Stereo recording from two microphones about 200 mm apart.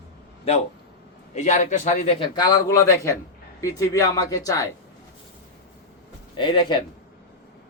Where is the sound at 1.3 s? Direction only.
35° left (ahead or behind); by 4.6 s 15° left (ahead or behind).